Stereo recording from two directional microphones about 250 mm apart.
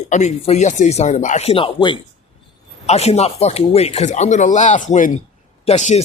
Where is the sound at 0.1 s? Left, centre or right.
Left.